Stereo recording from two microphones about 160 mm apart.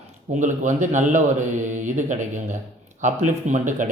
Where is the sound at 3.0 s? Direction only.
50° right (ahead or behind).